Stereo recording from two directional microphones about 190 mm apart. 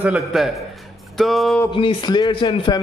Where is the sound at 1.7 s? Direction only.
25° left (ahead or behind).